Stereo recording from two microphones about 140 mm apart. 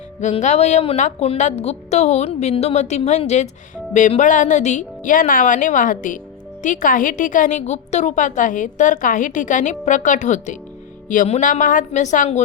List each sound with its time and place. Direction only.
0.2 s a woman's voice: 55° left (ahead or behind)
11.9 s a woman's voice: 60° left (ahead or behind)